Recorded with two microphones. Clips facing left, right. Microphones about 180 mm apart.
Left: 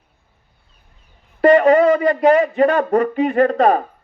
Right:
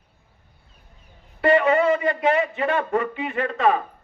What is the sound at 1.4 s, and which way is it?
A man's voice, 40° left (ahead or behind).